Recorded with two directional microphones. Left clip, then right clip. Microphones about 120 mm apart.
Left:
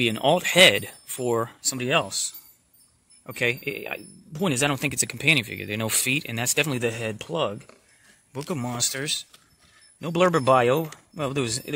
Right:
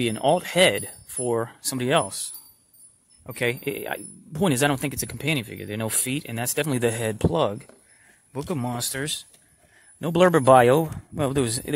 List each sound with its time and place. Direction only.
0.0 s speech: centre (ahead or behind)
1.6 s speech: 25° right (ahead or behind)
3.3 s speech: 15° right (ahead or behind)
4.8 s speech: 5° right (ahead or behind)
6.8 s speech: 25° right (ahead or behind)
8.5 s speech: 15° right (ahead or behind)
9.9 s speech: 30° right (ahead or behind)